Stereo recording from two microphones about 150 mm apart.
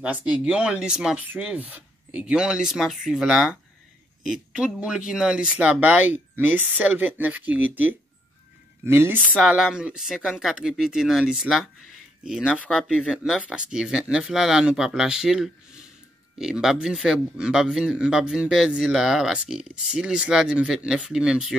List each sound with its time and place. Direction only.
0.0 s a man's voice: 10° right (ahead or behind)
9.4 s a man's voice: 5° right (ahead or behind)